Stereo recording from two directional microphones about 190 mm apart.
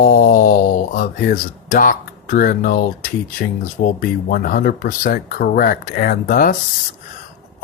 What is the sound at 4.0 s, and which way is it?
Speech, 50° left (ahead or behind).